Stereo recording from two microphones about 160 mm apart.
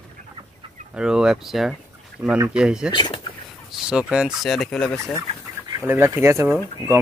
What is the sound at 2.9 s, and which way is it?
Speech, 25° left (ahead or behind).